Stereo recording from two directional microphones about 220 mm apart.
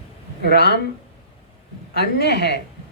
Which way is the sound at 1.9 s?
50° left (ahead or behind).